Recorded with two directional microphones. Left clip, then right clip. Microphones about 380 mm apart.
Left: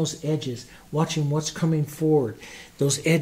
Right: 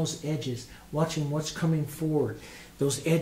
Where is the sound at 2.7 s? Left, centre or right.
Left.